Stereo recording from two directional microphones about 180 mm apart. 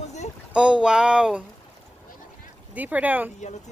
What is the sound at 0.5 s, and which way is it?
Speech, 5° right (ahead or behind).